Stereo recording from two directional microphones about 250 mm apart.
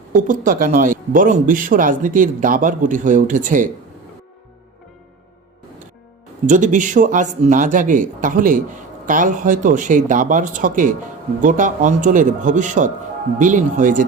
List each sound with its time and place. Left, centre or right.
0.1 s speech: right
6.5 s speech: right